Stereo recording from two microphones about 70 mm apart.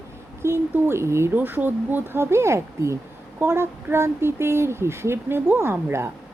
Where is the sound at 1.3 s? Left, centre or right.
Right.